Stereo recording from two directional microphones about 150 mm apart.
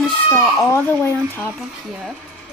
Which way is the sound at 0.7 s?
15° left (ahead or behind).